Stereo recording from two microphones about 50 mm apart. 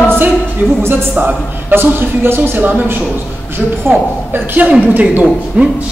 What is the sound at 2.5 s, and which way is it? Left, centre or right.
Speech, right.